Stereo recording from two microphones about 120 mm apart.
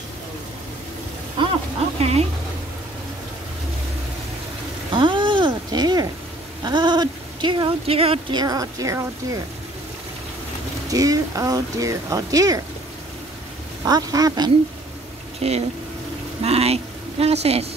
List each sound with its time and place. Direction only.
1.4 s a sound: 40° right (ahead or behind)
2.0 s speech: 60° right (ahead or behind)
4.9 s a sound: 45° right (ahead or behind)
6.6 s speech: 40° right (ahead or behind)
7.8 s speech: 55° right (ahead or behind)
8.4 s speech: 30° right (ahead or behind)
10.9 s speech: 30° right (ahead or behind)
13.8 s speech: 30° right (ahead or behind)
15.4 s speech: 55° right (ahead or behind)